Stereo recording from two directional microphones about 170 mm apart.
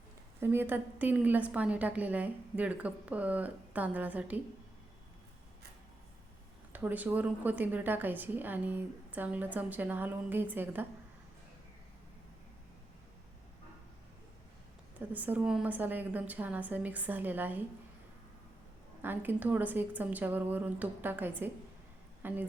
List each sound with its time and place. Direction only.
0.3 s a woman's voice: 15° right (ahead or behind)
6.7 s a woman's voice: 10° right (ahead or behind)
14.9 s a woman's voice: 10° right (ahead or behind)
19.0 s a woman's voice: 10° right (ahead or behind)